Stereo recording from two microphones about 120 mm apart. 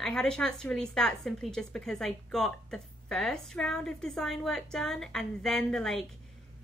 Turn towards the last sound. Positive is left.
turn(degrees=5)  # may be behind; listen again after turning